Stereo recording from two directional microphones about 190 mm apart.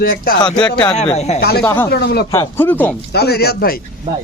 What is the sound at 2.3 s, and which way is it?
Speech, 15° left (ahead or behind).